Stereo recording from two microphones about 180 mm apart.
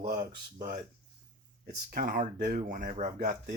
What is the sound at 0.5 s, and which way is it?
Speech, 55° right (ahead or behind).